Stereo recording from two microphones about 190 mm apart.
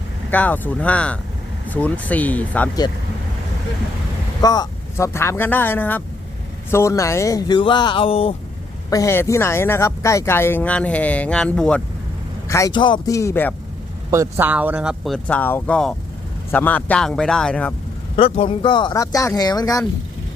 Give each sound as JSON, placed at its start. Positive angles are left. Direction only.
{"t": 0.3, "sound": "speech", "side_deg": 10}
{"t": 4.4, "sound": "speech", "side_deg": 20}
{"t": 8.9, "sound": "speech", "side_deg": 15}
{"t": 12.5, "sound": "speech", "side_deg": 15}
{"t": 14.1, "sound": "speech", "side_deg": -15}
{"t": 18.2, "sound": "speech", "side_deg": 30}